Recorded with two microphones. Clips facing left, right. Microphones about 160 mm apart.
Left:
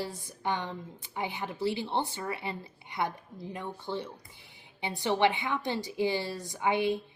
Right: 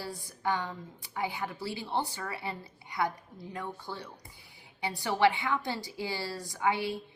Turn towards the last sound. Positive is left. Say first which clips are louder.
# left 3 dB
turn(degrees=20)  # may be behind; listen again after turning